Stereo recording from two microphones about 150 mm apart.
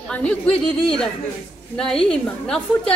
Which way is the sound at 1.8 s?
5° left (ahead or behind).